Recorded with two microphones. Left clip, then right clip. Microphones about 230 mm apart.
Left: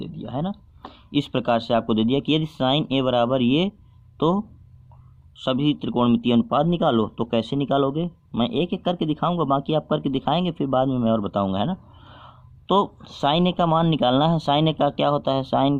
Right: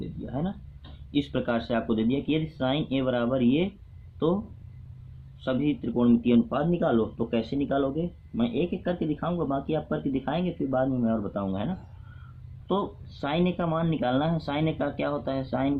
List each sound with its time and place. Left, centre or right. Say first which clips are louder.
0.3 s speech: left 5 dB; left
5.4 s speech: left 5 dB; left